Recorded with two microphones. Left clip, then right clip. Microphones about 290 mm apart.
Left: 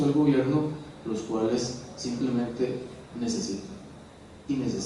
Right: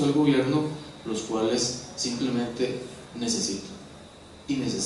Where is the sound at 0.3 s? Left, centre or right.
Centre.